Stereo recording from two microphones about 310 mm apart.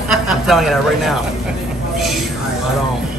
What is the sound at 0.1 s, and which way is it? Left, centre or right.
A woman's voice, centre.